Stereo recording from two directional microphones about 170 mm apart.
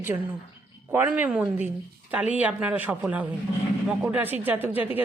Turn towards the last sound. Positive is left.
turn(degrees=-10)  # may be behind; listen again after turning